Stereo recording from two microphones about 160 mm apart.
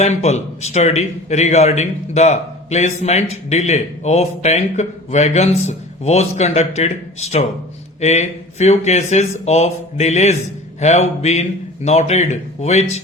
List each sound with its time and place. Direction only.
0.0 s speech: 45° left (ahead or behind)